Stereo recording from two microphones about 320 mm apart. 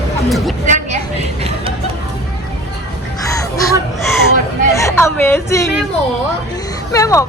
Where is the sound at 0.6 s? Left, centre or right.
Centre.